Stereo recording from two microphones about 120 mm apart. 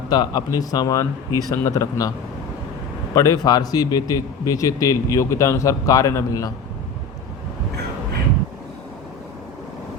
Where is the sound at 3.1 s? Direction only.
25° left (ahead or behind).